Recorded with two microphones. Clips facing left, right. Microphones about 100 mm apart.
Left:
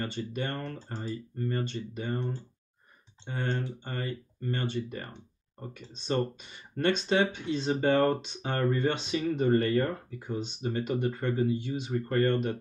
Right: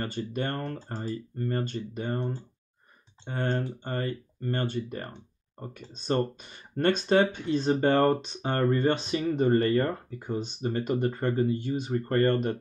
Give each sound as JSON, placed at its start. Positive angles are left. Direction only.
{"t": 0.0, "sound": "speech", "side_deg": -45}